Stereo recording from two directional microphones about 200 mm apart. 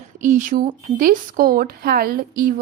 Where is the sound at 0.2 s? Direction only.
40° right (ahead or behind).